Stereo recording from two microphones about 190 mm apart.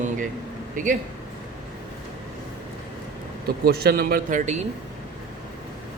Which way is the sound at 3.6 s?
55° right (ahead or behind).